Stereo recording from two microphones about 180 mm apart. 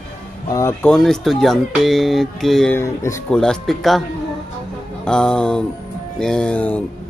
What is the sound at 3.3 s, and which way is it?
Speech, 5° left (ahead or behind).